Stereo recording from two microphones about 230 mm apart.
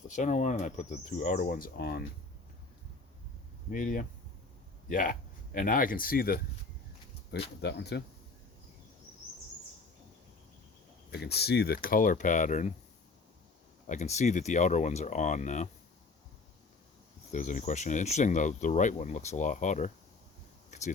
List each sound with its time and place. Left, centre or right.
0.1 s speech: left
3.7 s speech: left
11.1 s speech: left
13.8 s speech: left
17.3 s speech: left
20.7 s a sound: left